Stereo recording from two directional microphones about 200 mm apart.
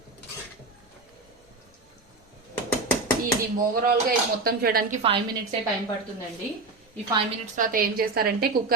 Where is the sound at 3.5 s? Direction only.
45° right (ahead or behind).